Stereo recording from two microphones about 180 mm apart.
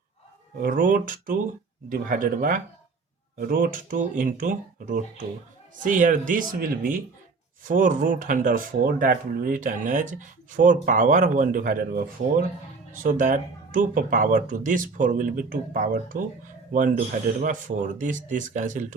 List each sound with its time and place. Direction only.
0.6 s speech: 50° right (ahead or behind)